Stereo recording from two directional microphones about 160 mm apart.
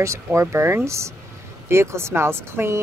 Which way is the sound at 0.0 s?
15° right (ahead or behind).